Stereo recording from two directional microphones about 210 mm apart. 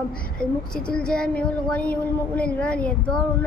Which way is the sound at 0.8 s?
5° left (ahead or behind).